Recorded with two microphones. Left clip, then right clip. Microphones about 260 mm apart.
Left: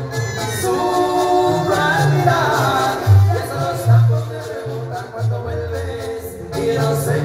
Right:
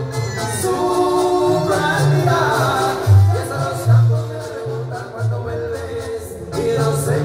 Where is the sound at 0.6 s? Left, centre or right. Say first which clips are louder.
Even; left.